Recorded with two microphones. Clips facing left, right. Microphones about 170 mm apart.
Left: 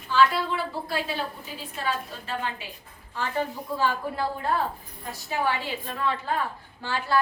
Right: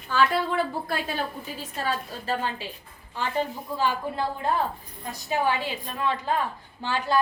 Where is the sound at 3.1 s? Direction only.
20° right (ahead or behind).